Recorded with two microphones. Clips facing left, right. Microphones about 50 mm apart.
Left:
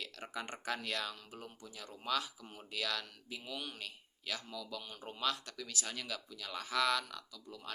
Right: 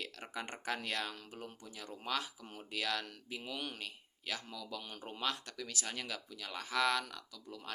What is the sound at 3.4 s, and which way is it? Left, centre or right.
Speech, right.